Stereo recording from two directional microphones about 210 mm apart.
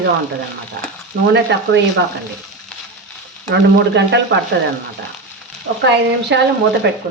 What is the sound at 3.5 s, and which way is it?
A woman's voice, 55° right (ahead or behind).